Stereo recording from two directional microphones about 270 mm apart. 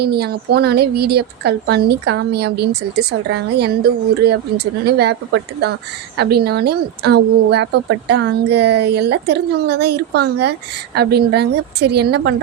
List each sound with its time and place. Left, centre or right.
0.0 s a woman's voice: right